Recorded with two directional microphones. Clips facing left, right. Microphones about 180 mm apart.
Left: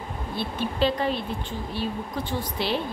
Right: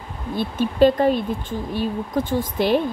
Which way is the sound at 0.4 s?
45° right (ahead or behind).